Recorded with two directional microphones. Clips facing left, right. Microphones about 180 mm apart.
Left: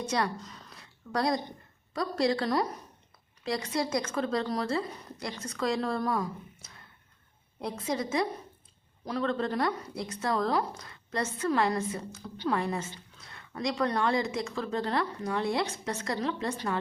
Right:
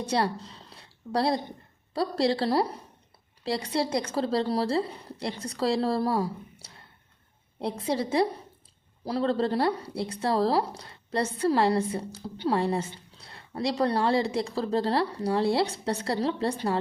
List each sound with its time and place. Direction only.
0.0 s a woman's voice: 30° right (ahead or behind)